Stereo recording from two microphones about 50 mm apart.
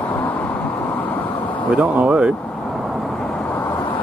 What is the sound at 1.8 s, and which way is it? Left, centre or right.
Speech, right.